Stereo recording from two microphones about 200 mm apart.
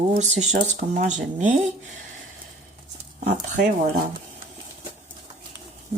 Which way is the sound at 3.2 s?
40° right (ahead or behind).